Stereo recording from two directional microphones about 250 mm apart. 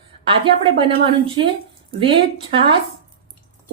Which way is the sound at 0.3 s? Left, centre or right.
Right.